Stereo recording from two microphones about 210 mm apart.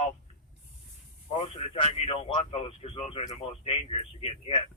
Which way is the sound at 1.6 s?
25° left (ahead or behind).